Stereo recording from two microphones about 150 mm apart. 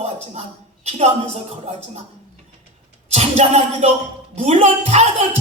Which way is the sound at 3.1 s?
45° right (ahead or behind).